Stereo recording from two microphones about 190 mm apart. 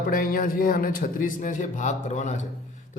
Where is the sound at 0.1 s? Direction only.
50° left (ahead or behind).